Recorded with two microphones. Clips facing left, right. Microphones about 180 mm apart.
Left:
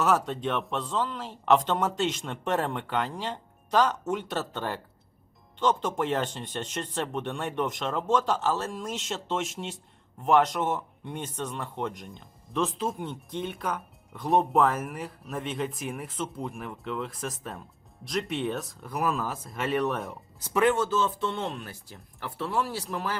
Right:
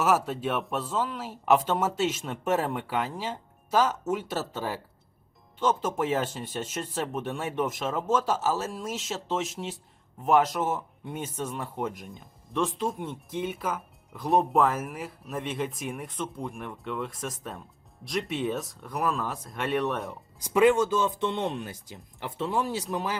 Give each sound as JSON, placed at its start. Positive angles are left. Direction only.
{"t": 0.0, "sound": "speech", "side_deg": -5}
{"t": 20.4, "sound": "speech", "side_deg": -15}